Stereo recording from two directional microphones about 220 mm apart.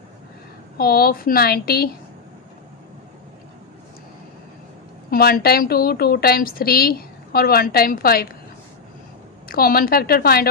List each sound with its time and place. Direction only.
0.8 s a woman's voice: 40° left (ahead or behind)
5.1 s a woman's voice: 45° left (ahead or behind)
9.5 s a woman's voice: 40° left (ahead or behind)